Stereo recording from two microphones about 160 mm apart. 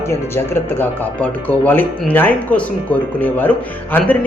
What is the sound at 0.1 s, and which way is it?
Speech, 15° left (ahead or behind).